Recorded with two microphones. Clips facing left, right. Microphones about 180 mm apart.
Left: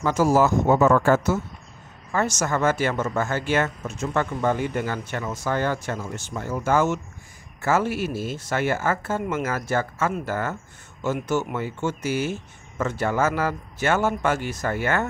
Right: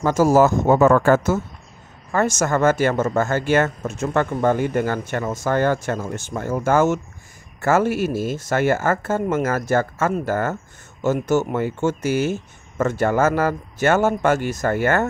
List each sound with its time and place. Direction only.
0.0 s speech: 45° right (ahead or behind)